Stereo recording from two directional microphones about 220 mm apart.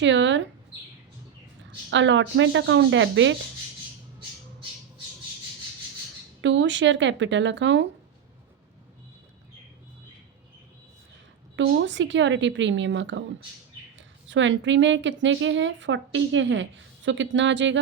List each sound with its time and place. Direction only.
0.0 s speech: 55° right (ahead or behind)
1.9 s a woman's voice: 55° right (ahead or behind)
6.4 s a woman's voice: 55° right (ahead or behind)
11.5 s a woman's voice: 55° right (ahead or behind)
14.3 s a woman's voice: 55° right (ahead or behind)